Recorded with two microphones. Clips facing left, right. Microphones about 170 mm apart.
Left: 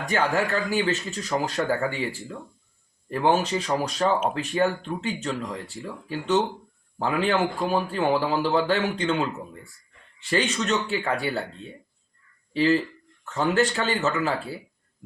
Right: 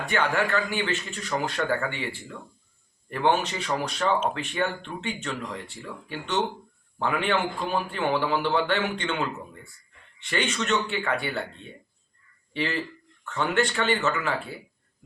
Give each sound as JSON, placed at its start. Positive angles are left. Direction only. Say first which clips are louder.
{"t": 0.0, "sound": "a man's voice", "louder": "left 1 dB", "side_deg": 35}
{"t": 10.2, "sound": "a man's voice", "louder": "left 3 dB", "side_deg": 35}
{"t": 12.5, "sound": "a man's voice", "louder": "left 8 dB", "side_deg": 35}